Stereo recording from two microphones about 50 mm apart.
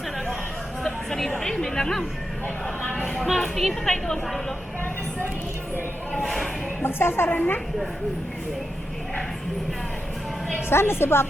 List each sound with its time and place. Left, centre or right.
0.9 s a sound: centre
1.4 s speech: centre
3.2 s a woman's voice: centre
6.1 s a woman's voice: centre
6.8 s a woman's voice: left
7.3 s a woman's voice: left
10.7 s a woman's voice: left